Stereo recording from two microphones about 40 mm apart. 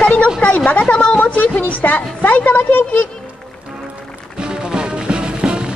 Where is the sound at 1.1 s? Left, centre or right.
Left.